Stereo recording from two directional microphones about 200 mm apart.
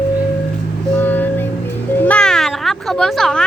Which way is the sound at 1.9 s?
5° left (ahead or behind).